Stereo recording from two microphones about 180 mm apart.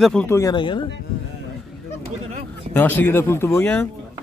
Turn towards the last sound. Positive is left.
turn(degrees=10)  # may be behind; listen again after turning